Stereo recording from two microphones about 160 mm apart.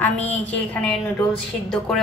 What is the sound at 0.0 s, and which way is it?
A woman's voice, 10° left (ahead or behind).